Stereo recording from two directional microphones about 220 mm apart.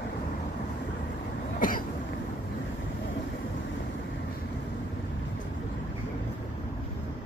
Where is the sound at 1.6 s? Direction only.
40° left (ahead or behind).